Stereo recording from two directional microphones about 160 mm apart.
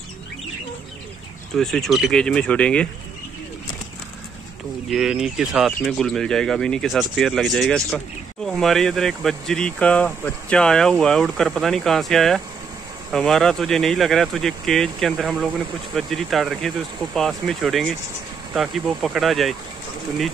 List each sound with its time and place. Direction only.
1.5 s speech: 5° left (ahead or behind)
4.8 s speech: centre (ahead or behind)